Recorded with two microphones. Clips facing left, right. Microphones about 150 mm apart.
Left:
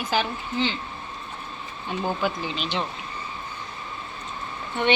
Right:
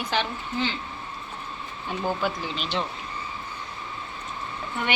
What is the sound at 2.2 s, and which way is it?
Speech, centre (ahead or behind).